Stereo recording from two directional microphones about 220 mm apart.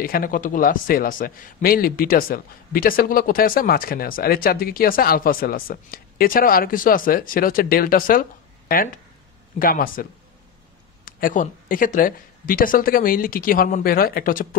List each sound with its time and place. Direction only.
0.0 s a man's voice: 40° left (ahead or behind)
11.1 s a man's voice: 40° left (ahead or behind)